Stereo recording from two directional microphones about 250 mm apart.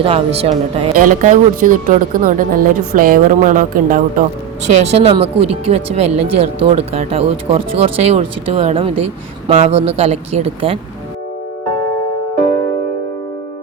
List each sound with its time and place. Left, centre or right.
0.0 s a woman's voice: right